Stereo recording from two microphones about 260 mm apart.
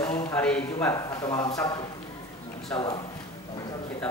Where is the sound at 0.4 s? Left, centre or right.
Centre.